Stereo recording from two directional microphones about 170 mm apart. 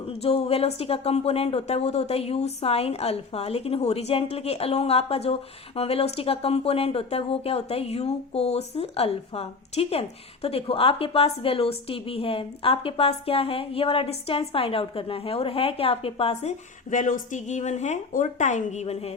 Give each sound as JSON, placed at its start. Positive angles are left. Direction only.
{"t": 0.0, "sound": "speech", "side_deg": 35}